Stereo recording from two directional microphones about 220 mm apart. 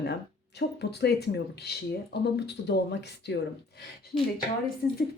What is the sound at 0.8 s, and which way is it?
Speech, 50° left (ahead or behind).